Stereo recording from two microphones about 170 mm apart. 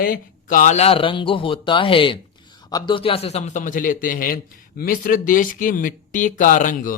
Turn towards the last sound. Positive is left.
turn(degrees=50)  # may be behind; listen again after turning